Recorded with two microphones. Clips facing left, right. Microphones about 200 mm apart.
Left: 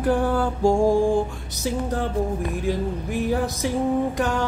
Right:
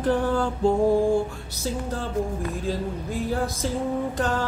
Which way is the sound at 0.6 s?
85° left.